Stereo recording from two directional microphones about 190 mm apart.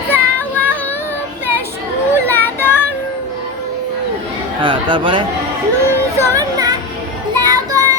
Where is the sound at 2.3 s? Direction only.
10° left (ahead or behind).